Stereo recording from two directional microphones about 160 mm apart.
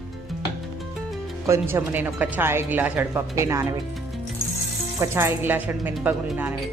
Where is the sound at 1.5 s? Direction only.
15° right (ahead or behind).